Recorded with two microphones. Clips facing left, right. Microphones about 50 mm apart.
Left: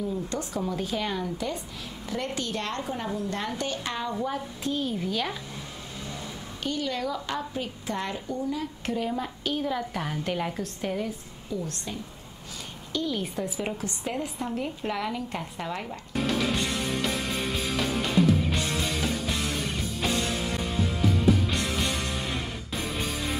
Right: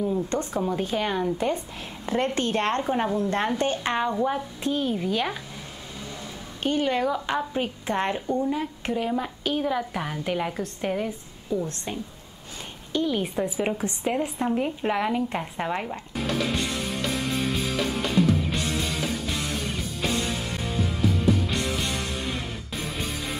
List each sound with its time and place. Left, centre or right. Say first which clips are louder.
0.0 s a woman's voice: right 5 dB; right
4.1 s a woman's voice: right 5 dB; centre
6.6 s a woman's voice: right 6 dB; right
8.8 s a woman's voice: right 2 dB; centre
11.6 s a woman's voice: right 3 dB; right
12.9 s a woman's voice: right 4 dB; centre
16.2 s music: even; centre